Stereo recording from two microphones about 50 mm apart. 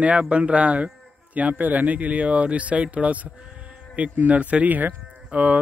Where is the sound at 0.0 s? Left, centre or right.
Right.